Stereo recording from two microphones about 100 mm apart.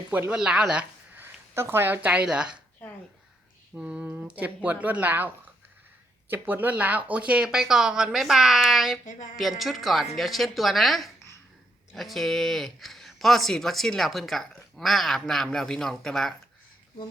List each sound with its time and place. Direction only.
0.3 s speech: 10° right (ahead or behind)
1.2 s speech: 25° right (ahead or behind)
3.8 s speech: 15° right (ahead or behind)
6.3 s speech: 20° right (ahead or behind); by 16.3 s 5° left (ahead or behind)